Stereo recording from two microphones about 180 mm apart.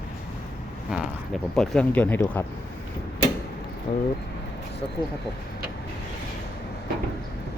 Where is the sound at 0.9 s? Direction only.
Centre (ahead or behind).